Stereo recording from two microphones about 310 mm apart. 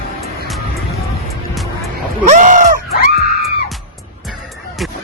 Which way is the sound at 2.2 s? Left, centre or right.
Right.